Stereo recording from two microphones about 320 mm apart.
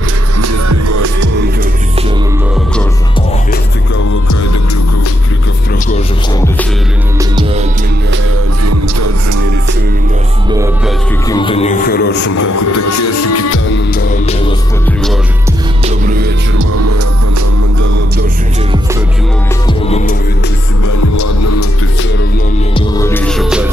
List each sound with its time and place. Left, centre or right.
0.4 s music: right
7.2 s music: centre
11.2 s music: centre; by 12.3 s left
12.4 s music: left
13.9 s music: left
15.8 s music: right
16.5 s music: right
20.8 s music: left
22.8 s music: centre